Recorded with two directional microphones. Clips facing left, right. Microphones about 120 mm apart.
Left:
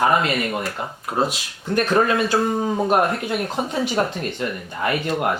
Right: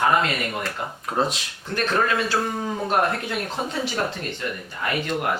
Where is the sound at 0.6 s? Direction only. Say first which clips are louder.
Left 2 dB; 5° left (ahead or behind).